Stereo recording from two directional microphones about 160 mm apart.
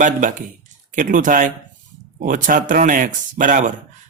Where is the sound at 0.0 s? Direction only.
55° right (ahead or behind).